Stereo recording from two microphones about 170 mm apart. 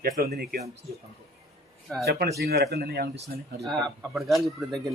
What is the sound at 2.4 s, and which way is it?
Speech, 70° right (ahead or behind).